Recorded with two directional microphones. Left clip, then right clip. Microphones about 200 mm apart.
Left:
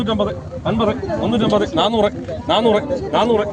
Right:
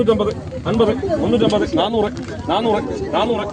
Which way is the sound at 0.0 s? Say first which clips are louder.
Right 3 dB; 50° left (ahead or behind).